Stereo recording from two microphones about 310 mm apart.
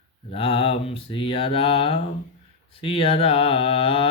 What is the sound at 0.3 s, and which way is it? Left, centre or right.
Mantra, centre.